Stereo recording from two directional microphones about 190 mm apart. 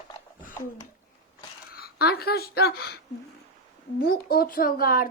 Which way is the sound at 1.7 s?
55° left (ahead or behind).